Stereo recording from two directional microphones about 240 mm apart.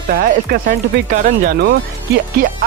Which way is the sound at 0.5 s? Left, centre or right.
Right.